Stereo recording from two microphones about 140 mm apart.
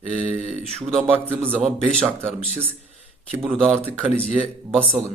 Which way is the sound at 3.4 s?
Centre (ahead or behind).